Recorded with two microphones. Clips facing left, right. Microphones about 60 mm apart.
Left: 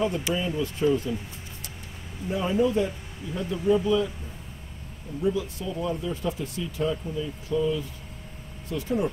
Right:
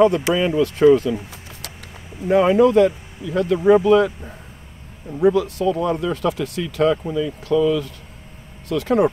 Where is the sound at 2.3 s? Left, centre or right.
Right.